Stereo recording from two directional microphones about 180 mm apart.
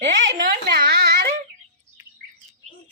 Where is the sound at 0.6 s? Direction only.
65° right (ahead or behind).